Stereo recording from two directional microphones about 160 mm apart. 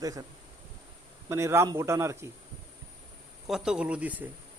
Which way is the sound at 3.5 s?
5° right (ahead or behind).